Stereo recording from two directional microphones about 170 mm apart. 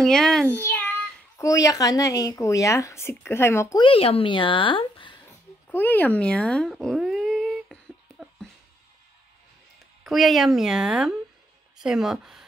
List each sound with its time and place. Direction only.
0.0 s a child's voice: 5° left (ahead or behind)
3.8 s a woman's voice: 35° left (ahead or behind)
5.7 s a sound: 10° left (ahead or behind)
10.0 s speech: centre (ahead or behind)